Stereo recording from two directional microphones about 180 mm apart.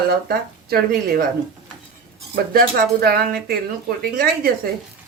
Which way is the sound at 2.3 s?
60° right (ahead or behind).